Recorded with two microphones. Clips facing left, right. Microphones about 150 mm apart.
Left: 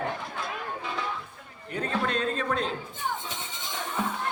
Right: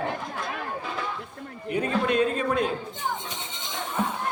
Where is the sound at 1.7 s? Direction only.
15° right (ahead or behind).